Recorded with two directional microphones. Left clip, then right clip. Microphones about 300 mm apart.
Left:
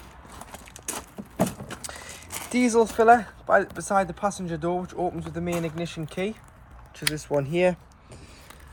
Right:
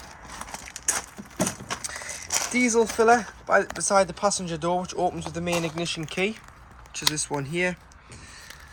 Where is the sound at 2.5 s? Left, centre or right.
Centre.